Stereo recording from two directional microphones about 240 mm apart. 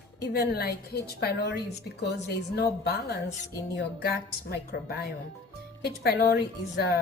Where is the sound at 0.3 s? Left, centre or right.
Left.